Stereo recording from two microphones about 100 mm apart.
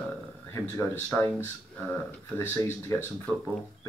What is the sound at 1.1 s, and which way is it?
Speech, 25° left (ahead or behind).